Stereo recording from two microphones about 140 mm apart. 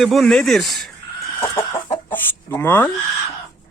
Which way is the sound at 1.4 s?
20° left (ahead or behind).